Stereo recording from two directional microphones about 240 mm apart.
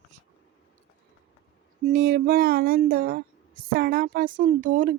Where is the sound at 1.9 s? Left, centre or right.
Right.